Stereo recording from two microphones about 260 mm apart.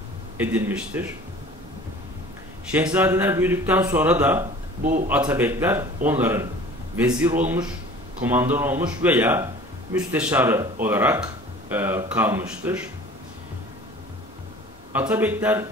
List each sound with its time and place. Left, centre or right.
0.4 s speech: centre
2.7 s speech: centre
4.8 s a man's voice: right
5.1 s speech: centre
15.0 s speech: centre